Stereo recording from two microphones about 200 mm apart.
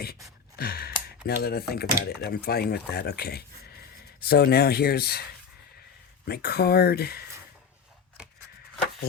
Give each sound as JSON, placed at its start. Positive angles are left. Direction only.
{"t": 0.5, "sound": "sigh", "side_deg": 50}
{"t": 1.0, "sound": "speech", "side_deg": 50}
{"t": 6.2, "sound": "speech", "side_deg": 50}